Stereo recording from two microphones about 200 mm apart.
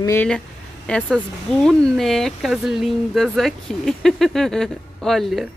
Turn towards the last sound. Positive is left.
turn(degrees=0)  # may be behind; listen again after turning